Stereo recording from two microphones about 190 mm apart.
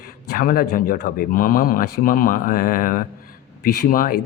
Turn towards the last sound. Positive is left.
turn(degrees=50)  # may be behind; listen again after turning